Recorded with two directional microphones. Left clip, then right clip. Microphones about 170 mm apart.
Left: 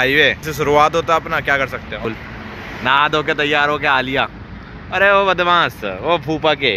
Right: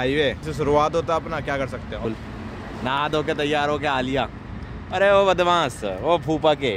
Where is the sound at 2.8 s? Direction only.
15° right (ahead or behind).